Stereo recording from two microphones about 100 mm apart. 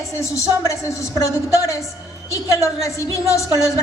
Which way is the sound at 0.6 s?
30° left (ahead or behind).